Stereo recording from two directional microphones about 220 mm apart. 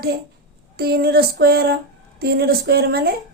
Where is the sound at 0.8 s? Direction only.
45° right (ahead or behind).